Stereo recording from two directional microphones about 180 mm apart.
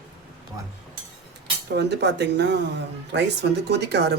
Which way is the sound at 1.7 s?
70° right (ahead or behind).